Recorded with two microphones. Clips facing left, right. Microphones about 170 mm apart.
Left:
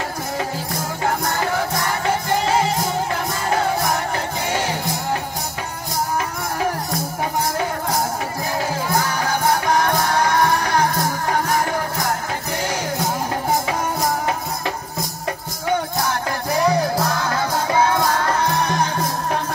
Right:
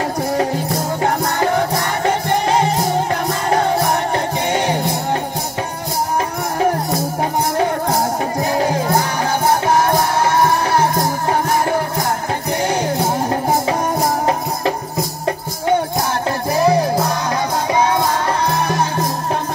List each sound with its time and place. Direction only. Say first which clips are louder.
10.6 s music: right 3 dB; 25° right (ahead or behind)
16.6 s music: right 4 dB; 20° right (ahead or behind)